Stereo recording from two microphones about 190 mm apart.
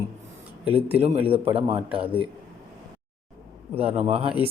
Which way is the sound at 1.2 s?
30° right (ahead or behind).